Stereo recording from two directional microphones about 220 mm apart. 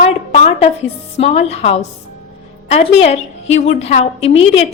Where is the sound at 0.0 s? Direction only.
30° left (ahead or behind).